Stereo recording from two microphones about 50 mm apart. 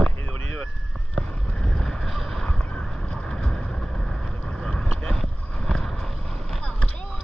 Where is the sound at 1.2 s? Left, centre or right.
Centre.